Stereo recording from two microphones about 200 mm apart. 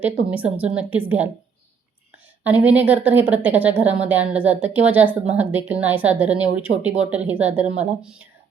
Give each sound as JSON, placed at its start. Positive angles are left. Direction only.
{"t": 0.0, "sound": "a woman's voice", "side_deg": -5}
{"t": 2.4, "sound": "a woman's voice", "side_deg": -10}